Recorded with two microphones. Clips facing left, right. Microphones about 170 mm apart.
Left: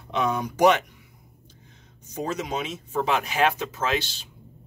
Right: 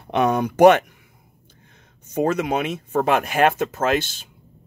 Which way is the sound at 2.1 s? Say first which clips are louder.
Right 8 dB; 60° right (ahead or behind).